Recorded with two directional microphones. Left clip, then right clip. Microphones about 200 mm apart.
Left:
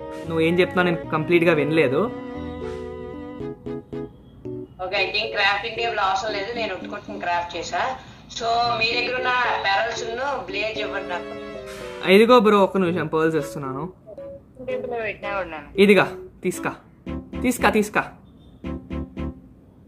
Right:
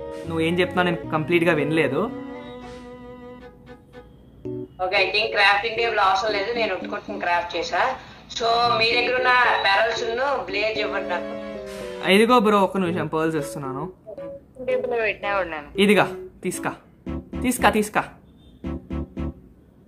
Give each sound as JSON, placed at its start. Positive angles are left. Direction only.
{"t": 0.0, "sound": "music", "side_deg": 0}
{"t": 4.7, "sound": "a woman's voice", "side_deg": -25}
{"t": 11.2, "sound": "speech", "side_deg": 0}
{"t": 14.6, "sound": "a woman's voice", "side_deg": -25}
{"t": 15.7, "sound": "speech", "side_deg": -5}
{"t": 18.6, "sound": "music", "side_deg": 0}